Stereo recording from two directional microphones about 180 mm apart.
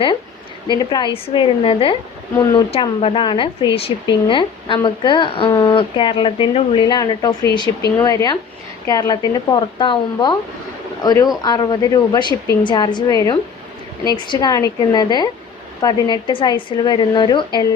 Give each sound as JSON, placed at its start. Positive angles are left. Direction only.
{"t": 0.7, "sound": "a woman's voice", "side_deg": 25}